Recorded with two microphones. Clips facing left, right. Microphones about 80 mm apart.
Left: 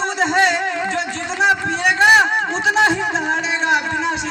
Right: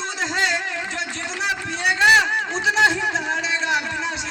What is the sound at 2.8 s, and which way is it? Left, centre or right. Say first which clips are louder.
Music: left 2 dB; left.